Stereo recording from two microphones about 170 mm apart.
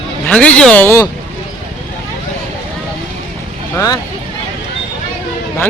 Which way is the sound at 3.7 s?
20° left (ahead or behind).